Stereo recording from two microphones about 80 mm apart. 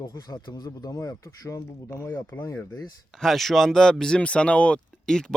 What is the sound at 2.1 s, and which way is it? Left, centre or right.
Speech, left.